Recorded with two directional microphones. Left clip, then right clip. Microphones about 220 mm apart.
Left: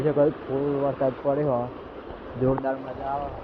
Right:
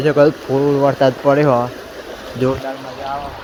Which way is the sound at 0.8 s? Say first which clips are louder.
Right 11 dB; 55° right (ahead or behind).